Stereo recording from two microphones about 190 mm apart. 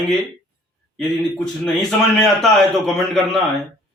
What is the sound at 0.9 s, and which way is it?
A man's voice, centre (ahead or behind).